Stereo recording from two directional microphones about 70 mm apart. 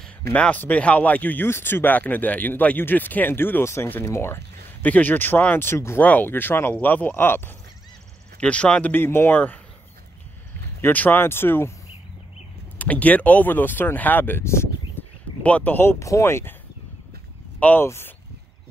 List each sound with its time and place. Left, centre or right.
0.3 s speech: centre; by 4.4 s left
4.8 s speech: left
5.9 s speech: left
8.4 s speech: centre
8.9 s speech: left
10.8 s speech: left
12.7 s speech: left
15.4 s speech: left
16.0 s speech: left
17.6 s speech: left
17.8 s speech: left